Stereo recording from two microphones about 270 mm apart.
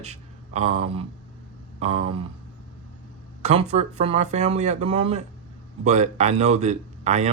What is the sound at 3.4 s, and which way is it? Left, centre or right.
Speech, right.